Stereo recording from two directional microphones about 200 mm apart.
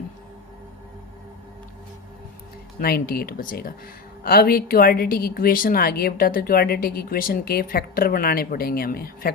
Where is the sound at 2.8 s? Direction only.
50° left (ahead or behind).